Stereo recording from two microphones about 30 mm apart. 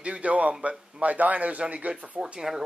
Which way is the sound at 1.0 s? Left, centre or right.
Right.